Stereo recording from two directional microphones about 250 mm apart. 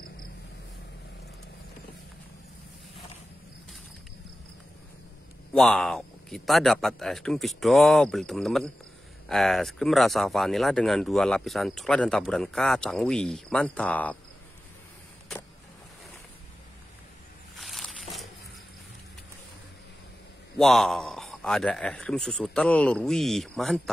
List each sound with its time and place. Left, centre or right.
5.5 s speech: centre
17.6 s a sound: centre
20.5 s speech: centre